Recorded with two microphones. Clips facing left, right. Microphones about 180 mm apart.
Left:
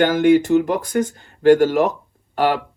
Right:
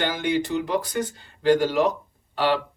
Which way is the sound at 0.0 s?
50° left (ahead or behind).